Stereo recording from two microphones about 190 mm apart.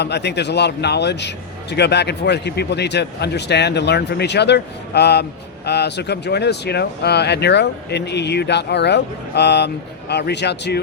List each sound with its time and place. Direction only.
0.0 s speech: 60° left (ahead or behind)